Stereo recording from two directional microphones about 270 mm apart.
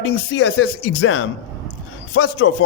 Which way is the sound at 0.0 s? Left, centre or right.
Left.